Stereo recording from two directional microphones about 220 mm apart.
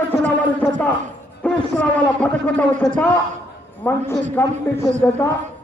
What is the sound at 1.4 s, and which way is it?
A man's voice, 5° left (ahead or behind).